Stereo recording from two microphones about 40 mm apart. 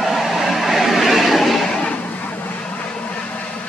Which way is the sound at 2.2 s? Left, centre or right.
Left.